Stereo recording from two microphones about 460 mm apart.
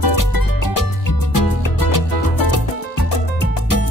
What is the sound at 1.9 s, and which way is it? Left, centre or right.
Music, left.